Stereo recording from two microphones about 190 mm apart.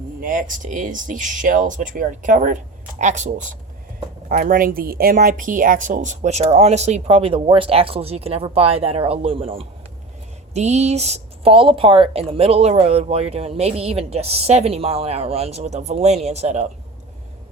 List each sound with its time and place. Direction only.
0.2 s speech: 45° right (ahead or behind)